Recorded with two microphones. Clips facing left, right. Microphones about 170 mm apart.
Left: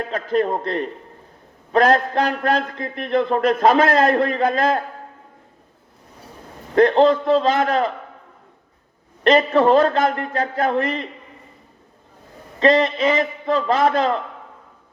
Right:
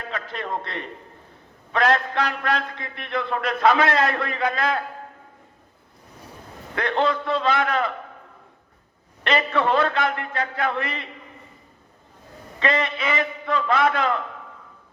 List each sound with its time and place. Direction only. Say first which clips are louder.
0.0 s a man's voice: left 11 dB; 45° left (ahead or behind)
6.7 s a man's voice: left 9 dB; 40° left (ahead or behind)
9.2 s a man's voice: left 7 dB; 40° left (ahead or behind)
12.5 s a man's voice: left 8 dB; 35° left (ahead or behind)